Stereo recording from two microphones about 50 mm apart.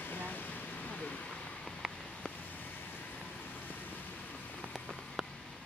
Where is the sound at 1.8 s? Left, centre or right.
Centre.